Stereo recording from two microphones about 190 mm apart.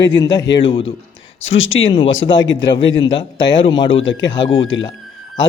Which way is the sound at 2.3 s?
75° left (ahead or behind).